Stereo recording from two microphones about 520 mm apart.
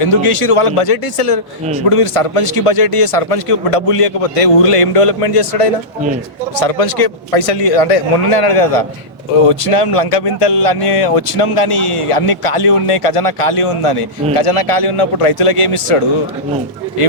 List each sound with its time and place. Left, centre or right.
0.0 s a man's voice: left